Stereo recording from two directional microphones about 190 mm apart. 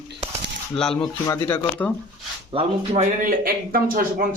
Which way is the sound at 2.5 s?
35° right (ahead or behind).